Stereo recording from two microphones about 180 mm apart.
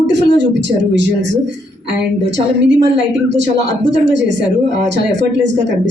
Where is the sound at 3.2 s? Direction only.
75° right (ahead or behind).